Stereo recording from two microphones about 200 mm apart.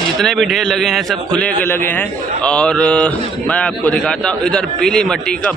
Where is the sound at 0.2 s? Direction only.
Centre (ahead or behind).